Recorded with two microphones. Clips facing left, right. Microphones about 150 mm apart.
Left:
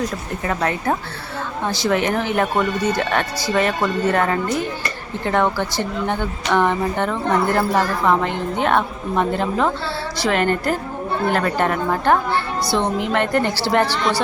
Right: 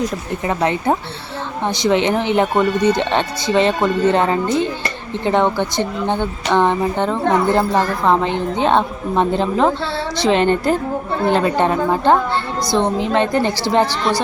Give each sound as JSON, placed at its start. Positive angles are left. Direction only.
{"t": 0.4, "sound": "a woman's voice", "side_deg": -20}